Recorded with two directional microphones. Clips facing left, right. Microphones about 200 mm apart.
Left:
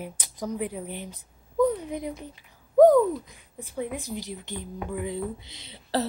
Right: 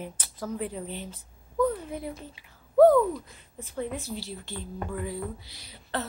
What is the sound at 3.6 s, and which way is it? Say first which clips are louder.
A woman's voice: left 1 dB; 10° left (ahead or behind).